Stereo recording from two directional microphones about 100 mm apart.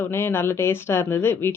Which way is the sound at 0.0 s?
25° left (ahead or behind).